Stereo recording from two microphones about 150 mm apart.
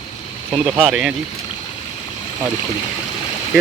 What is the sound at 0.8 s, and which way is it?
Speech, 10° right (ahead or behind).